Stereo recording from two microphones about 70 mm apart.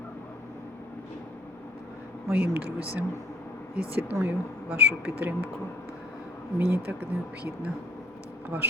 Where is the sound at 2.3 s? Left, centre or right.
Right.